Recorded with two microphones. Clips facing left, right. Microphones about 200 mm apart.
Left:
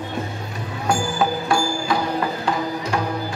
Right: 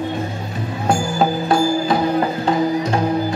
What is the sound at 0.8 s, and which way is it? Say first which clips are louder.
Music: right 3 dB; 25° right (ahead or behind).